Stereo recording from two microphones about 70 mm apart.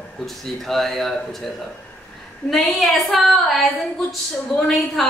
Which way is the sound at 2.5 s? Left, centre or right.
Centre.